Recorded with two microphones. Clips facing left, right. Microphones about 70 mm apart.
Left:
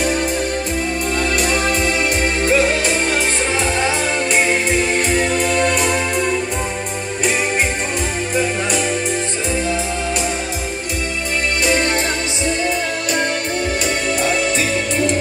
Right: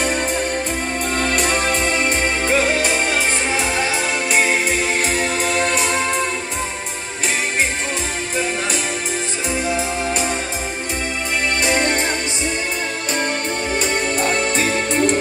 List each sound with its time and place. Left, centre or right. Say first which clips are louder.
1.1 s music: even; right
4.3 s music: even; centre
11.6 s music: left 2 dB; right
14.2 s music: left 1 dB; right